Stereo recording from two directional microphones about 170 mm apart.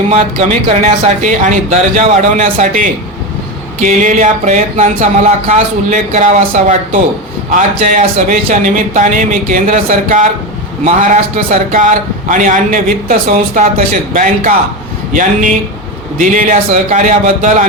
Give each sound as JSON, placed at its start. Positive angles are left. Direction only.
{"t": 0.1, "sound": "speech", "side_deg": -40}